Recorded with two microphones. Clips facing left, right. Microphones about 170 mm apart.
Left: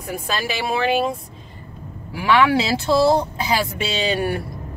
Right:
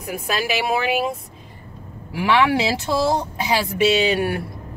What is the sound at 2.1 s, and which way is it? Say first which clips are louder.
Speech: left 1 dB; 20° right (ahead or behind).